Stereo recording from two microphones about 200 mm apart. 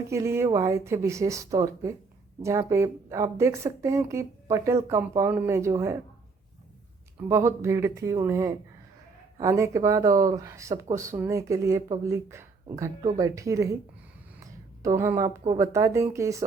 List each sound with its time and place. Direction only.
0.1 s speech: 15° right (ahead or behind)
7.2 s speech: 15° right (ahead or behind)
14.9 s speech: 15° right (ahead or behind)